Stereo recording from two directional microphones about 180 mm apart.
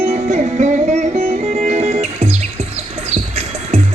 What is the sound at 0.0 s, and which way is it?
Music, 35° right (ahead or behind).